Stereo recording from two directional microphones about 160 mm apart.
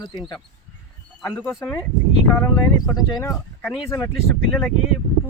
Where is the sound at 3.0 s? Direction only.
25° left (ahead or behind).